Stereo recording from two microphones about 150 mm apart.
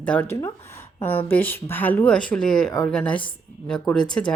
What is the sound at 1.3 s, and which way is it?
A woman's voice, 10° left (ahead or behind).